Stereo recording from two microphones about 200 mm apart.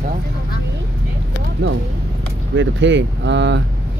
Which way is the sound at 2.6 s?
65° right (ahead or behind).